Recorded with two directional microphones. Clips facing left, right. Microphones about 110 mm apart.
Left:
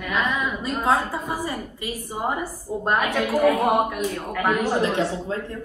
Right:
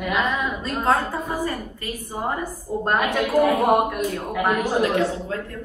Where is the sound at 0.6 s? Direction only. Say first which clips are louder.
Even; 10° left (ahead or behind); by 4.5 s 10° right (ahead or behind).